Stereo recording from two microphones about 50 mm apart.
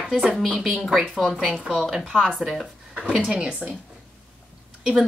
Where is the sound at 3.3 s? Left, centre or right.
Centre.